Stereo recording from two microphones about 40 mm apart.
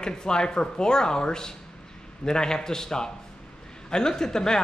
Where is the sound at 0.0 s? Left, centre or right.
Centre.